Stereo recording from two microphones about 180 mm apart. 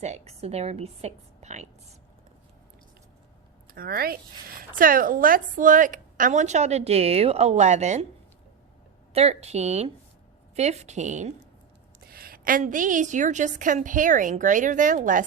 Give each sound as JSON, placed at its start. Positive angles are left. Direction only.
{"t": 0.0, "sound": "a woman's voice", "side_deg": -35}
{"t": 3.8, "sound": "a woman's voice", "side_deg": -55}
{"t": 9.1, "sound": "a woman's voice", "side_deg": -35}
{"t": 12.0, "sound": "a woman's voice", "side_deg": -55}